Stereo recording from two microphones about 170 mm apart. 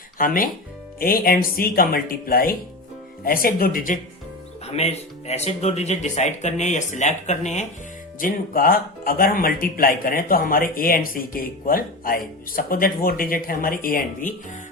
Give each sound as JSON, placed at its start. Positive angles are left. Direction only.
{"t": 0.2, "sound": "speech", "side_deg": 55}
{"t": 4.6, "sound": "speech", "side_deg": 40}
{"t": 8.2, "sound": "speech", "side_deg": 55}